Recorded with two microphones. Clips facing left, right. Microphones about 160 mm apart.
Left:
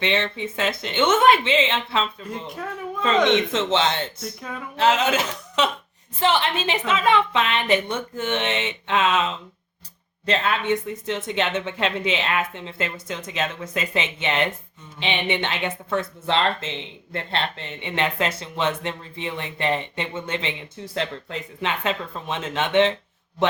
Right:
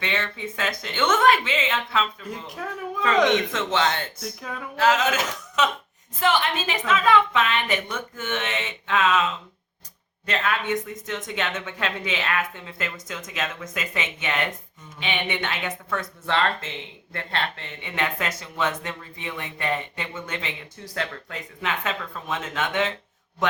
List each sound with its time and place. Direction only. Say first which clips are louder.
0.0 s speech: left 5 dB; 25° left (ahead or behind)
2.3 s speech: left 2 dB; centre (ahead or behind)
3.2 s speech: left 3 dB; 25° left (ahead or behind)
4.2 s speech: left 1 dB; centre (ahead or behind)
4.8 s speech: left 1 dB; 30° left (ahead or behind)